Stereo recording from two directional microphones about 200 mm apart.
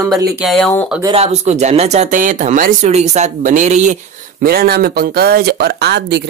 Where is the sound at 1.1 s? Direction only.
30° right (ahead or behind).